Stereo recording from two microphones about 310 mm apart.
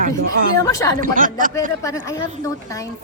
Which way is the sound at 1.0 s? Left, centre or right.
Right.